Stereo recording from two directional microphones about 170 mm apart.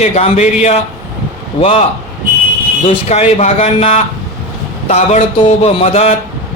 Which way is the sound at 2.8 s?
40° left (ahead or behind).